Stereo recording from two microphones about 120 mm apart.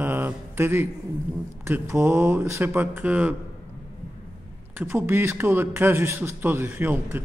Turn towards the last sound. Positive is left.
turn(degrees=-15)  # may be behind; listen again after turning